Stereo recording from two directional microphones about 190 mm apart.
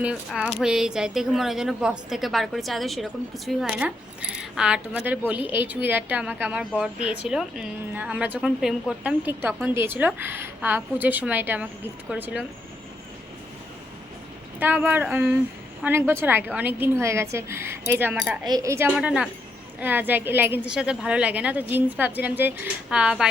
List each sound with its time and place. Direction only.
0.0 s a woman's voice: 5° right (ahead or behind)
14.6 s a woman's voice: 10° right (ahead or behind)
18.9 s a woman's voice: 5° right (ahead or behind)